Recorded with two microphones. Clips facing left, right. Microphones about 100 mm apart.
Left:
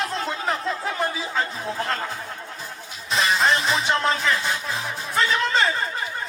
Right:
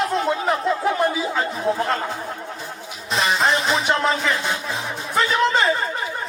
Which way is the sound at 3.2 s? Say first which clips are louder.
Right 1 dB; 35° right (ahead or behind).